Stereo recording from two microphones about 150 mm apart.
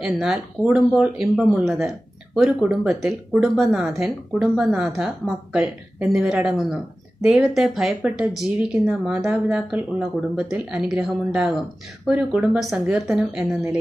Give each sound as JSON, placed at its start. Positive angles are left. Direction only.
{"t": 0.0, "sound": "speech", "side_deg": -5}